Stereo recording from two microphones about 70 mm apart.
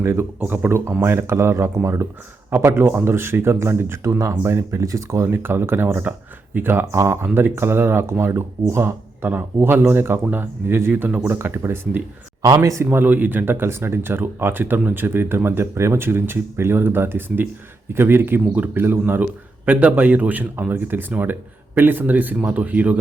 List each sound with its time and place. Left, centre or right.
0.0 s speech: right
0.3 s a man's voice: right
5.3 s speech: right
6.9 s speech: right
12.4 s speech: right
12.8 s speech: right
13.1 s a man's voice: right